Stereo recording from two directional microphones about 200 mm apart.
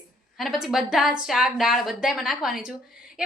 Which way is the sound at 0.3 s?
Centre (ahead or behind).